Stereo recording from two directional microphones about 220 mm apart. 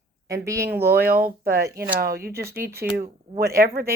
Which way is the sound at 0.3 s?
15° right (ahead or behind).